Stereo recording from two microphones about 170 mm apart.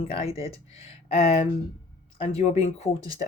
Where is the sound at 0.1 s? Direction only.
35° left (ahead or behind).